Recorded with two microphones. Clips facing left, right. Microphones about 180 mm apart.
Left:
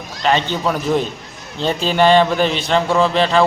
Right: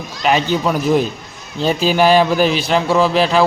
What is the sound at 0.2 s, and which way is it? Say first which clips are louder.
A man's voice: right 2 dB; 10° right (ahead or behind).